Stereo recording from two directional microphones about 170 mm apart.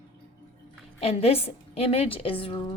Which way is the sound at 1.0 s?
35° left (ahead or behind).